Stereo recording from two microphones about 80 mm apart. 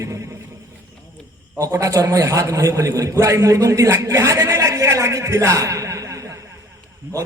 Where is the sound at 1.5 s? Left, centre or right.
Right.